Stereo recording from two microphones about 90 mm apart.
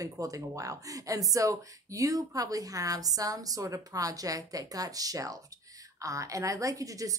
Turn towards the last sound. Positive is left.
turn(degrees=-40)  # may be behind; listen again after turning